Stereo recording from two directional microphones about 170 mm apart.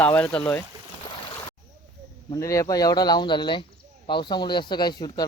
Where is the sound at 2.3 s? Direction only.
20° left (ahead or behind).